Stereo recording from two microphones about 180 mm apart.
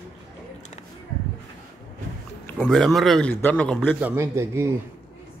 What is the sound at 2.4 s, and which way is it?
A man's voice, centre (ahead or behind).